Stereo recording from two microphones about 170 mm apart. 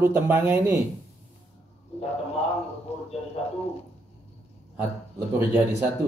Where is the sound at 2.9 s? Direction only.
40° left (ahead or behind).